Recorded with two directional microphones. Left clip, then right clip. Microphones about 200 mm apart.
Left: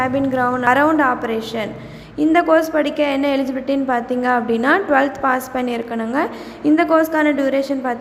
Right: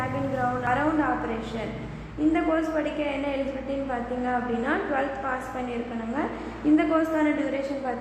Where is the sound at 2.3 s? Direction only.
45° left (ahead or behind).